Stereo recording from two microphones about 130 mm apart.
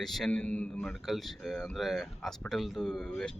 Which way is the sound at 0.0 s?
Centre (ahead or behind).